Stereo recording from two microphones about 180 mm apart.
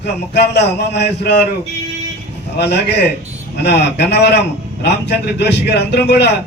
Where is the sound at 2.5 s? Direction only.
70° left (ahead or behind).